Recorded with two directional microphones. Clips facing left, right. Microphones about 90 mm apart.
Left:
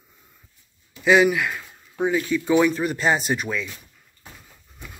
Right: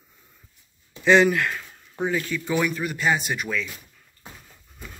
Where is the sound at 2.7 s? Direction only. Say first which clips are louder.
Left 3 dB; 30° left (ahead or behind).